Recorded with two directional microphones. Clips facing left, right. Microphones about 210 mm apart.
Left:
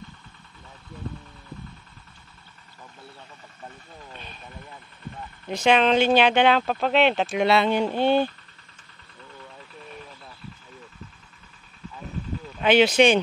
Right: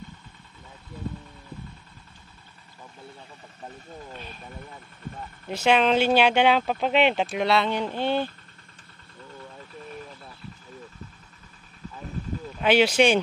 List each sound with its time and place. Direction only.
5.5 s speech: 5° right (ahead or behind)
7.2 s speech: 5° left (ahead or behind)
12.5 s speech: 10° right (ahead or behind)